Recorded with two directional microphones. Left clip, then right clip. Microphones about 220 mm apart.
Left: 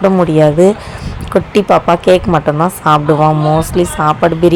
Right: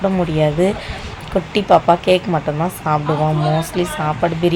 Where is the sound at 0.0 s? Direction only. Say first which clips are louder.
Left 8 dB; 20° left (ahead or behind).